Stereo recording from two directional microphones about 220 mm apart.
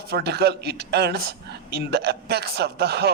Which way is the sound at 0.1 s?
45° right (ahead or behind).